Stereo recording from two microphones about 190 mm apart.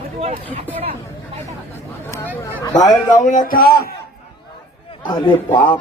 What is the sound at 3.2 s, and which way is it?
Speech, 45° left (ahead or behind).